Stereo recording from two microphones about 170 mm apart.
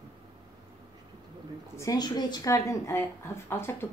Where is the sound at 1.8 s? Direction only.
20° left (ahead or behind).